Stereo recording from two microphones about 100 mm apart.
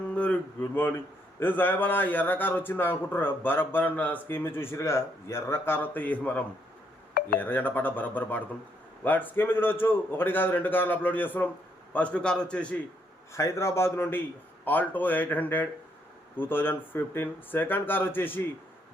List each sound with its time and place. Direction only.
0.6 s a man's voice: 20° left (ahead or behind)
13.3 s a man's voice: 30° left (ahead or behind)